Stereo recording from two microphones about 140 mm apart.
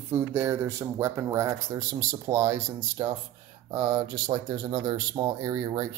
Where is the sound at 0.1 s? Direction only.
15° right (ahead or behind).